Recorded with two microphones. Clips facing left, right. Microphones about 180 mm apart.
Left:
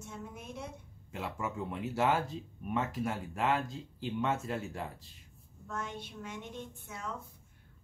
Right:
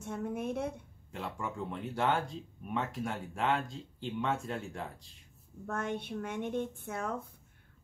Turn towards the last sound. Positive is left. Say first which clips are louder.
# right 6 dB
turn(degrees=-55)  # may be behind; listen again after turning